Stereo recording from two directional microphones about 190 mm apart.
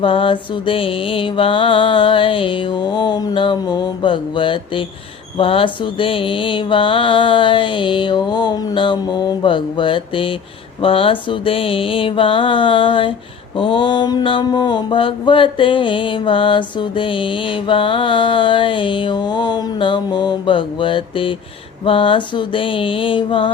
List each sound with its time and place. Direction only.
0.0 s mantra: 25° left (ahead or behind)